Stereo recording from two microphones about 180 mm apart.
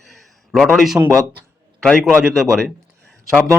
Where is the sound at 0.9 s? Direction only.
20° right (ahead or behind).